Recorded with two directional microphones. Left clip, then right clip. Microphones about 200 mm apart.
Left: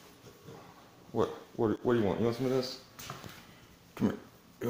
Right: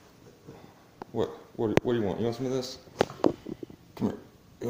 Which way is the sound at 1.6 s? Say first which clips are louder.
Right 3 dB; 5° right (ahead or behind).